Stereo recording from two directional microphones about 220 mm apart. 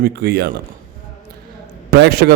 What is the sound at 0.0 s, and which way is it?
Speech, 45° right (ahead or behind).